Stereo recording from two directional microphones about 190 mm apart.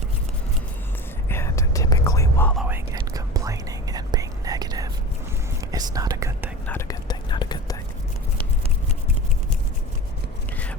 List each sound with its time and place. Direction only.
1.3 s whispering: 15° left (ahead or behind)
2.6 s whispering: 15° right (ahead or behind)
6.7 s whispering: 15° left (ahead or behind)